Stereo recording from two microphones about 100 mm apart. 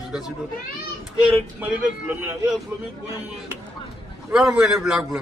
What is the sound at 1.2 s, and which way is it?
Speech, 10° right (ahead or behind).